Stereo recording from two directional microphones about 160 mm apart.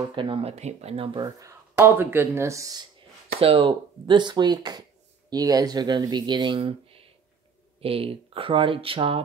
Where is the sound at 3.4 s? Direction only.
35° right (ahead or behind).